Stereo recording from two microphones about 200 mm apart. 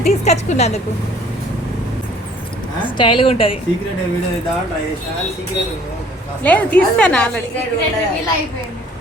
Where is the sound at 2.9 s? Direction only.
25° left (ahead or behind).